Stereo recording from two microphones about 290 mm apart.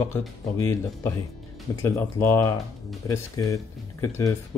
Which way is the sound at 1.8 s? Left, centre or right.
Centre.